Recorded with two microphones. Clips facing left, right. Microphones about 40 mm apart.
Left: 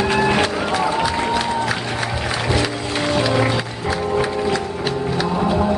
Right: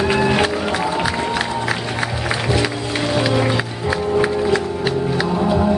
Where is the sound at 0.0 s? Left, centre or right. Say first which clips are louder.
Right 1 dB; centre.